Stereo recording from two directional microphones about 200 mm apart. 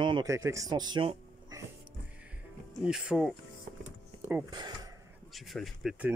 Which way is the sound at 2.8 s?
5° right (ahead or behind).